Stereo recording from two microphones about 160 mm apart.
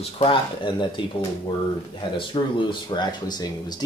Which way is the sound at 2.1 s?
30° left (ahead or behind).